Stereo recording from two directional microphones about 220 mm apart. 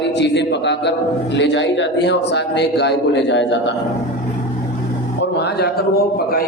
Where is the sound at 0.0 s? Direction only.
50° left (ahead or behind).